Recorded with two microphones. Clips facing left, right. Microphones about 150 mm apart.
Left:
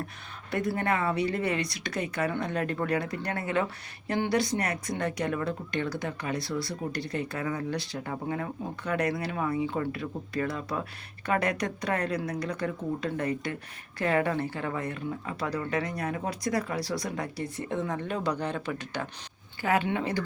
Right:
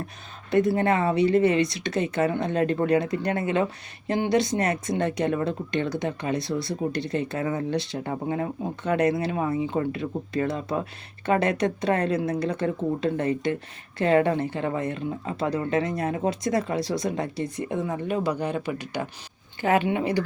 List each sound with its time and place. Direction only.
0.5 s speech: 25° right (ahead or behind)